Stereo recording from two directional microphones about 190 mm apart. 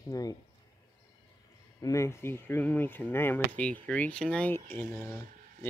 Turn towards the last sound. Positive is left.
turn(degrees=10)  # may be behind; listen again after turning